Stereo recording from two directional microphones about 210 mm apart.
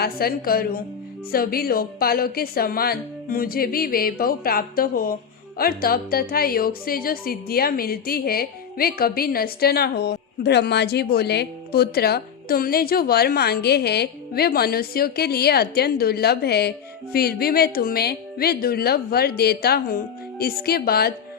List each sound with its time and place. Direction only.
0.0 s a woman's voice: 45° left (ahead or behind)